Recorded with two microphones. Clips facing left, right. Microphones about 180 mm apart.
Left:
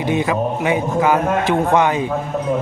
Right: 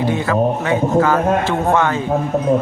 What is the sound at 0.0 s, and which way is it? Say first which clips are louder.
A man's voice: right 2 dB; 15° left (ahead or behind).